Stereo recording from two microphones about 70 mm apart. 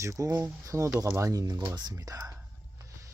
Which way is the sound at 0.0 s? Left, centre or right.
Right.